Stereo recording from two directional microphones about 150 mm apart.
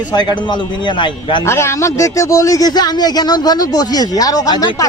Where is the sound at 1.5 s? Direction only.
15° left (ahead or behind).